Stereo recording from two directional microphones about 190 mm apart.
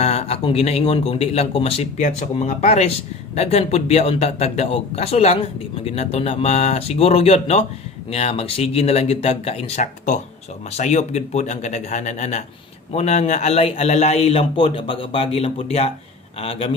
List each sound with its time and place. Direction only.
0.0 s speech: 35° left (ahead or behind)